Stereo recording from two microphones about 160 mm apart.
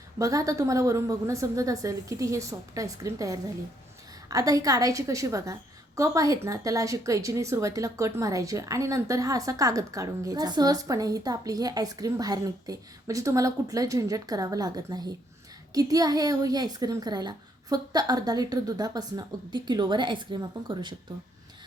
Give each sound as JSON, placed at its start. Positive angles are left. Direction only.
{"t": 0.2, "sound": "speech", "side_deg": -20}